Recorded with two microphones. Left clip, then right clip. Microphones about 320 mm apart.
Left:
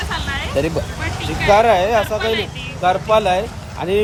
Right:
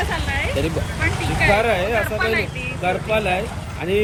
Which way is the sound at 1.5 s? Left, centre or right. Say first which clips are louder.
Left 6 dB; centre.